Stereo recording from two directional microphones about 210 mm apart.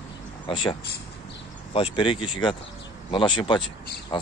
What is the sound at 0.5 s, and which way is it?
Speech, 25° left (ahead or behind).